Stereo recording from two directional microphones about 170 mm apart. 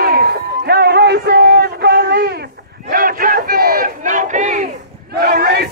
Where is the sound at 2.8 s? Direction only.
55° right (ahead or behind).